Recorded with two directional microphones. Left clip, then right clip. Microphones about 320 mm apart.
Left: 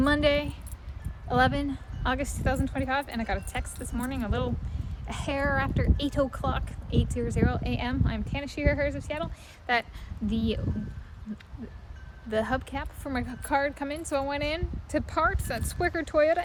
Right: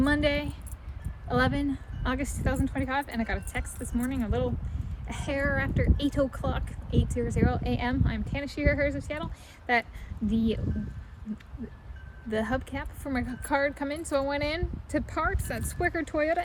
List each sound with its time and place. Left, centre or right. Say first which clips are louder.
0.0 s a sound: left 2 dB; centre
1.3 s a woman's voice: left 2 dB; centre
12.3 s a woman's voice: left 2 dB; centre